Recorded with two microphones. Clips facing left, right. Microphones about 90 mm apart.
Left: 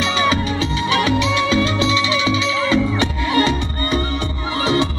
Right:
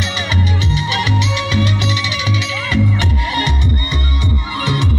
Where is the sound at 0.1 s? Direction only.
35° left (ahead or behind).